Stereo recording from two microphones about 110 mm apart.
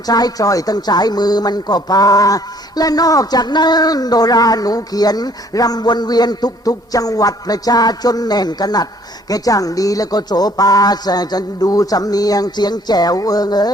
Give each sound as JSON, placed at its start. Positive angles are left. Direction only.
{"t": 0.0, "sound": "speech", "side_deg": 35}